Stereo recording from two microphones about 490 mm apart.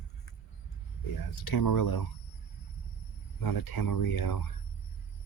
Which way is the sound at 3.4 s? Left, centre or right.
Left.